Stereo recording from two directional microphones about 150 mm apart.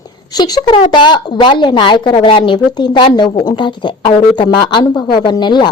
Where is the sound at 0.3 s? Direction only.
25° left (ahead or behind).